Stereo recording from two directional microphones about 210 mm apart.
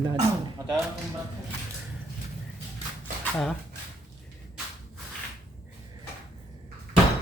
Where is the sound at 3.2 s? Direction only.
5° left (ahead or behind).